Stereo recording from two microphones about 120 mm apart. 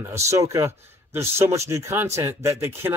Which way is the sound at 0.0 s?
25° right (ahead or behind).